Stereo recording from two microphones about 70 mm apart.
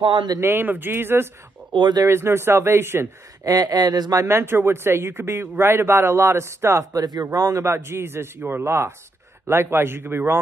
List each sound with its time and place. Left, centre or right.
0.4 s speech: right
1.8 s speech: right
2.0 s speech: right
3.4 s speech: right
4.2 s speech: right
7.6 s speech: right